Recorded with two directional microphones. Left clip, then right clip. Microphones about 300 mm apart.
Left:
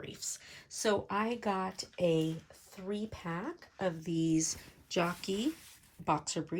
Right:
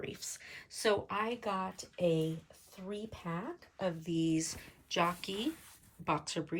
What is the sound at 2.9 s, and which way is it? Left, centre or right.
Speech, left.